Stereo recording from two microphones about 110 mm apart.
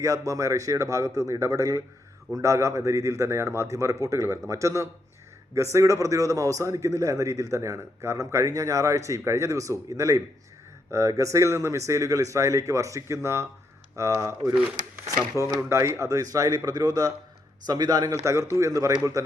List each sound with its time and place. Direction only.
0.0 s a man's voice: 30° right (ahead or behind)